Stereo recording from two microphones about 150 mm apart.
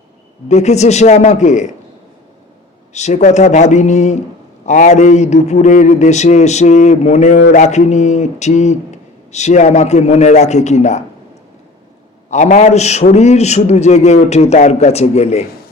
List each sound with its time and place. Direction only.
0.4 s a man's voice: 50° left (ahead or behind)
2.9 s a man's voice: 50° left (ahead or behind)
12.3 s a man's voice: 50° left (ahead or behind)